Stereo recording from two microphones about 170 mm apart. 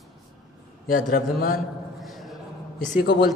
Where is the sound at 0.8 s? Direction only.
55° left (ahead or behind).